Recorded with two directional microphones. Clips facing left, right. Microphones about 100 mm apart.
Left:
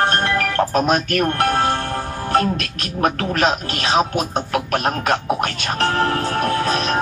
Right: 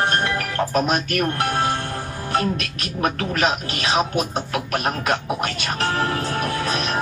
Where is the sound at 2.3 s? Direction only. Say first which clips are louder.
Left 4 dB; 40° left (ahead or behind).